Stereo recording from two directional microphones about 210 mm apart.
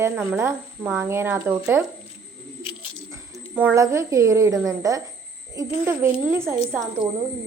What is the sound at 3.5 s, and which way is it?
A woman's voice, 10° right (ahead or behind).